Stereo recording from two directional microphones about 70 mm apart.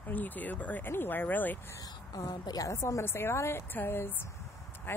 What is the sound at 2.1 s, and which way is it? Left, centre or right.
Speech, left.